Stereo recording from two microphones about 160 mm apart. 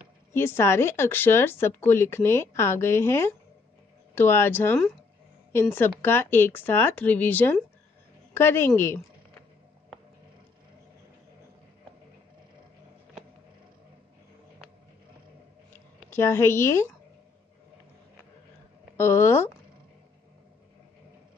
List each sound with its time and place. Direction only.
0.3 s speech: 15° left (ahead or behind)
16.1 s speech: 15° left (ahead or behind)
18.9 s speech: 15° left (ahead or behind)